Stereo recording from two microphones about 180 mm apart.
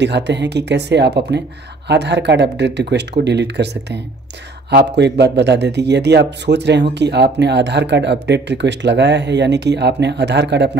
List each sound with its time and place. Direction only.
0.0 s speech: 75° right (ahead or behind)